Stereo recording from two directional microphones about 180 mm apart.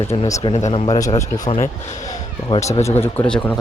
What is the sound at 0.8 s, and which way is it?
Speech, 20° left (ahead or behind).